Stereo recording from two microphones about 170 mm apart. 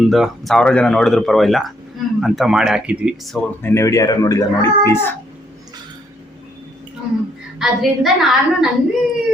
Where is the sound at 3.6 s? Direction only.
15° left (ahead or behind).